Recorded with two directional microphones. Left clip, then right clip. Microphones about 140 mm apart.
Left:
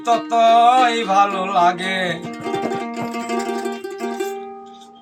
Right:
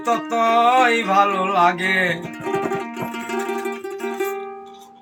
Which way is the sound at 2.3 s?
30° left (ahead or behind).